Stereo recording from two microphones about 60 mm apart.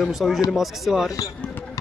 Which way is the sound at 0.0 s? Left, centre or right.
Centre.